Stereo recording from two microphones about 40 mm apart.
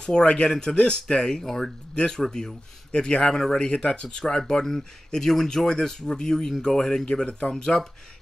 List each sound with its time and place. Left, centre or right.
0.0 s speech: centre